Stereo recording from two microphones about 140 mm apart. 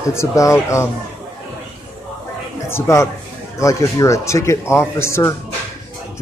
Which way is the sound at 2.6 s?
20° left (ahead or behind).